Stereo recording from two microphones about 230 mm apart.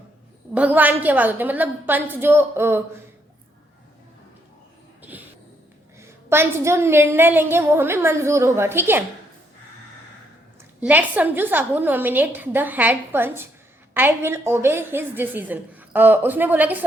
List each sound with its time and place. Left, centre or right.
0.5 s a woman's voice: centre
6.0 s a woman's voice: centre
10.8 s a woman's voice: centre